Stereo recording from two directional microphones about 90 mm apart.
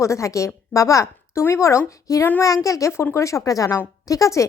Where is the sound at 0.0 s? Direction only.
35° left (ahead or behind).